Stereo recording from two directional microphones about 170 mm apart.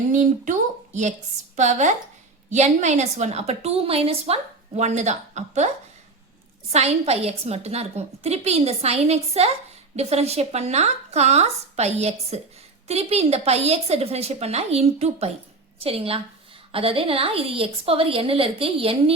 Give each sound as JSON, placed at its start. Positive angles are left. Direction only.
{"t": 0.1, "sound": "a woman's voice", "side_deg": -45}
{"t": 1.5, "sound": "a woman's voice", "side_deg": -45}